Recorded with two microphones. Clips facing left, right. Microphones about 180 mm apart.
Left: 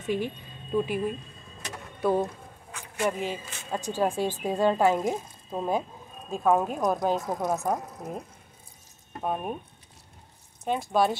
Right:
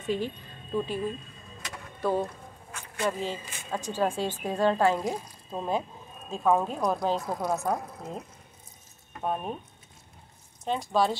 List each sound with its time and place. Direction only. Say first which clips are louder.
0.7 s speech: left 3 dB; 15° left (ahead or behind)
9.2 s speech: left 1 dB; 10° left (ahead or behind)
10.6 s speech: left 1 dB; 15° left (ahead or behind)